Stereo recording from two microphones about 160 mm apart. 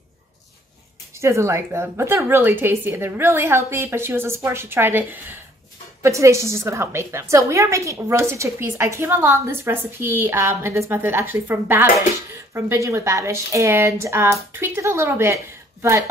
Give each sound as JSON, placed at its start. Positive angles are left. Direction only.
{"t": 1.2, "sound": "a woman's voice", "side_deg": -15}